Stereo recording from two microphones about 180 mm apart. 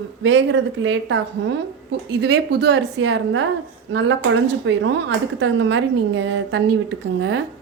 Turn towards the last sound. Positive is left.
turn(degrees=-70)  # may be behind; listen again after turning